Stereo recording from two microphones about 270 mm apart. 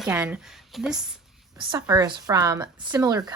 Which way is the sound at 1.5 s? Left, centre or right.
Centre.